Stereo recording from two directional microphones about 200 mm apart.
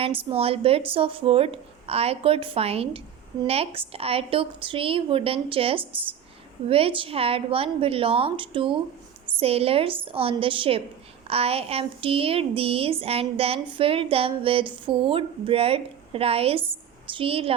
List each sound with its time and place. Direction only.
0.0 s speech: 30° right (ahead or behind)